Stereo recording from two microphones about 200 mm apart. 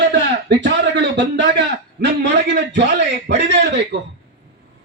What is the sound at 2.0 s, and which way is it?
A man's voice, 60° right (ahead or behind).